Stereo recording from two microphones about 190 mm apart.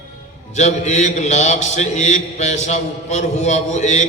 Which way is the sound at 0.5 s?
40° left (ahead or behind).